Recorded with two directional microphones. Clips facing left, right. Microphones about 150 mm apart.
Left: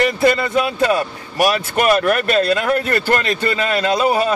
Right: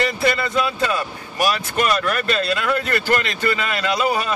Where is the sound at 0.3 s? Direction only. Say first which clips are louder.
Left 4 dB; 40° left (ahead or behind).